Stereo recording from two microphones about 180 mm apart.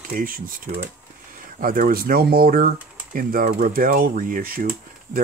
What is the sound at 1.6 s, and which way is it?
Speech, 50° right (ahead or behind).